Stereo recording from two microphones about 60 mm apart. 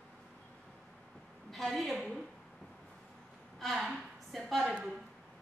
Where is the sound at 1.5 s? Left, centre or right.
Centre.